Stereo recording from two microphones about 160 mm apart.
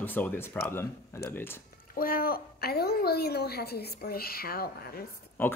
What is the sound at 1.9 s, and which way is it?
A woman's voice, 65° left (ahead or behind).